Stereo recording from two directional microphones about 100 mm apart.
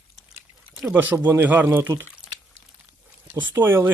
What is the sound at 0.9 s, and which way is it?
A man's voice, 15° right (ahead or behind).